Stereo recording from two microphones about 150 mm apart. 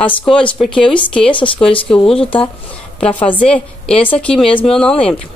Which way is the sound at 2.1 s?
35° left (ahead or behind).